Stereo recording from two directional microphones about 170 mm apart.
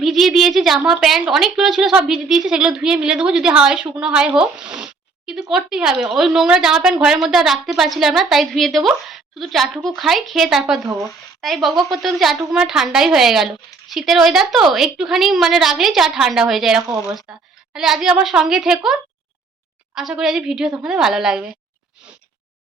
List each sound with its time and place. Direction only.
0.0 s a woman's voice: centre (ahead or behind)
20.0 s speech: centre (ahead or behind)